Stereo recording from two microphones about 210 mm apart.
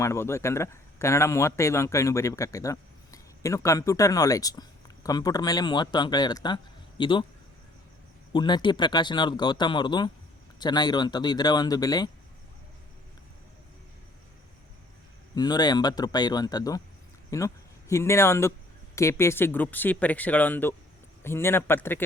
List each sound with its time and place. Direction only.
0.0 s speech: 15° left (ahead or behind)
8.3 s speech: 20° left (ahead or behind)
15.4 s speech: 20° left (ahead or behind)